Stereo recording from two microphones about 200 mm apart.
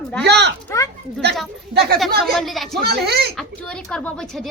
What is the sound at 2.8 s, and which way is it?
Speech, 50° right (ahead or behind).